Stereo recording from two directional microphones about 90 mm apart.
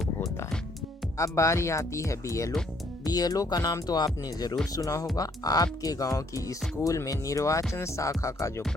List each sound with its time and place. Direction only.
1.2 s speech: 35° left (ahead or behind)